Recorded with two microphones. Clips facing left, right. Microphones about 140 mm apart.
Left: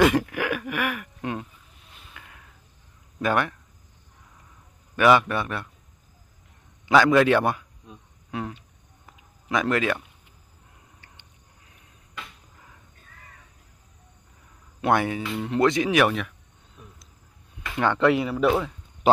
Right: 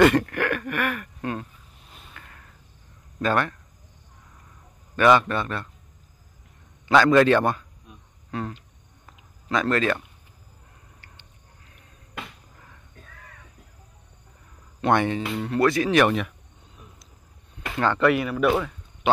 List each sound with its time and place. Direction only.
0.0 s speech: 5° left (ahead or behind)
2.1 s a sound: 10° left (ahead or behind)
3.2 s speech: 15° left (ahead or behind)
4.9 s speech: 10° left (ahead or behind)
6.9 s speech: 10° left (ahead or behind)
9.0 s a sound: 15° left (ahead or behind)
14.8 s speech: 5° left (ahead or behind)
16.0 s a sound: centre (ahead or behind)
17.7 s speech: 15° left (ahead or behind)
19.1 s speech: 40° left (ahead or behind)